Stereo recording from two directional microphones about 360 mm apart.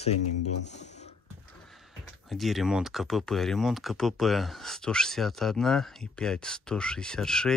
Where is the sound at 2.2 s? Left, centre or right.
Centre.